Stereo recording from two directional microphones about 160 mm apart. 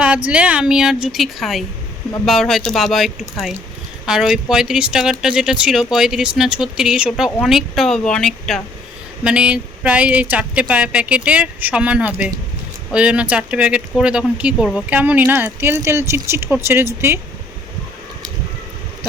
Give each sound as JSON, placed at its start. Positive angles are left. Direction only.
{"t": 0.3, "sound": "speech", "side_deg": -5}